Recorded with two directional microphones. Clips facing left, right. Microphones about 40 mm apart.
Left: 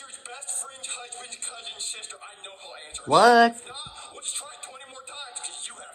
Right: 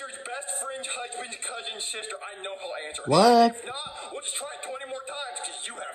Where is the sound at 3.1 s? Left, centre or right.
Left.